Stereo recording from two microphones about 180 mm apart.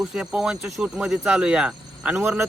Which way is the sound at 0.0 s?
5° right (ahead or behind).